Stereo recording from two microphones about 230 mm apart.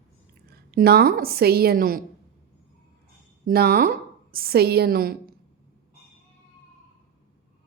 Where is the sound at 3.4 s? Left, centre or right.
Right.